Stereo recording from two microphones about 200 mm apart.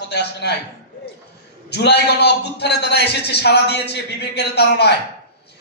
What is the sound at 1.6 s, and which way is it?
A man's voice, 55° left (ahead or behind).